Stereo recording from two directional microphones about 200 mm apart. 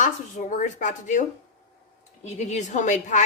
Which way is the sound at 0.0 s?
40° left (ahead or behind).